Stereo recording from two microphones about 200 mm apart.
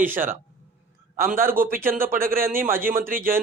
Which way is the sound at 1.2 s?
45° right (ahead or behind).